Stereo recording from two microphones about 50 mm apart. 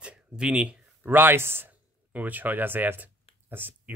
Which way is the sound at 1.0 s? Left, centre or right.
Right.